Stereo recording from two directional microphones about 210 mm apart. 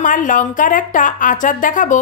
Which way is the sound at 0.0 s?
40° left (ahead or behind).